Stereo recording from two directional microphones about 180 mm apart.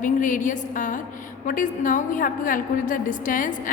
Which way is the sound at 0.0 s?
45° left (ahead or behind).